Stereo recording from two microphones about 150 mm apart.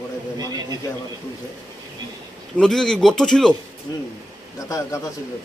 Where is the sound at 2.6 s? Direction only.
5° left (ahead or behind).